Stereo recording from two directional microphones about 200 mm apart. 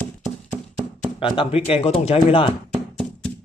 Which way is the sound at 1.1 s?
25° left (ahead or behind).